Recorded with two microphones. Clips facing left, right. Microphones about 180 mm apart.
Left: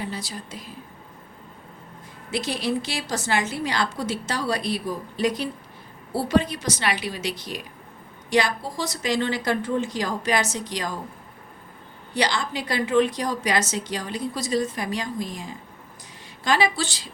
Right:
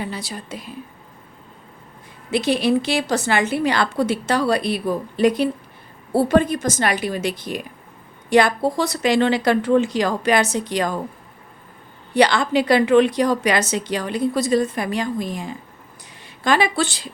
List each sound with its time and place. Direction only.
0.0 s a woman's voice: 65° right (ahead or behind)
2.3 s a woman's voice: 60° right (ahead or behind)
12.1 s a woman's voice: 60° right (ahead or behind)